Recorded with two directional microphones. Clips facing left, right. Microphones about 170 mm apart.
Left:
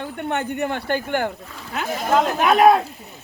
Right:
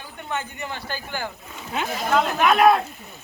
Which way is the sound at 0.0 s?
60° left (ahead or behind).